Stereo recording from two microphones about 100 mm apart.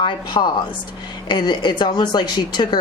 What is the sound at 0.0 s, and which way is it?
A woman's voice, 45° left (ahead or behind).